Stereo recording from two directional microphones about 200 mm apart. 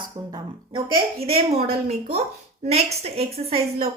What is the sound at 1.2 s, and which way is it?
Speech, 30° right (ahead or behind).